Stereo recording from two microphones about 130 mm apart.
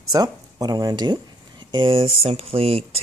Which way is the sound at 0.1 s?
30° right (ahead or behind).